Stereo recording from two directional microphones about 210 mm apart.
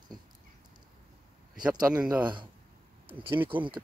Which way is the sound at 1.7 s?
10° right (ahead or behind).